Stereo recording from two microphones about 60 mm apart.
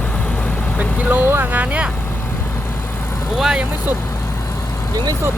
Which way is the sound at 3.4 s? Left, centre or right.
Centre.